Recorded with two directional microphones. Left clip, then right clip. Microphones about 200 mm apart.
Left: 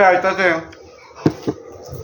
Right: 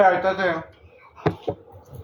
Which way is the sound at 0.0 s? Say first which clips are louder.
Left 5 dB; 30° left (ahead or behind).